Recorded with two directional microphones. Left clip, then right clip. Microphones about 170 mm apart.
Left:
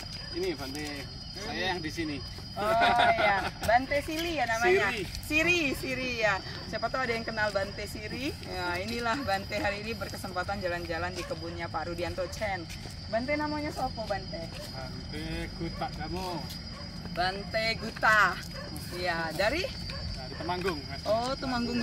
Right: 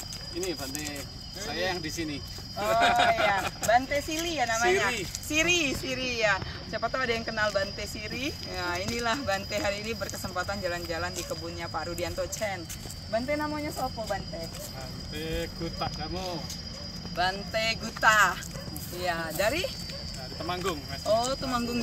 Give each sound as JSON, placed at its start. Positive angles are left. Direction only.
{"t": 0.4, "sound": "speech", "side_deg": -15}